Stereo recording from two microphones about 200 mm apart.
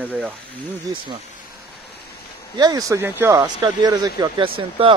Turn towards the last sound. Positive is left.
turn(degrees=-25)  # may be behind; listen again after turning